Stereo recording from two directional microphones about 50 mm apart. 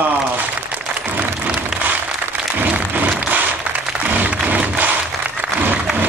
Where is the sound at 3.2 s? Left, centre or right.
Right.